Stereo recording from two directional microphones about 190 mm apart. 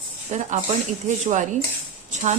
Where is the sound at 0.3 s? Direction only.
40° right (ahead or behind).